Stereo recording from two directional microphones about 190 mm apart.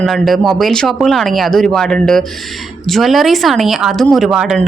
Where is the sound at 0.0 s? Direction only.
Centre (ahead or behind).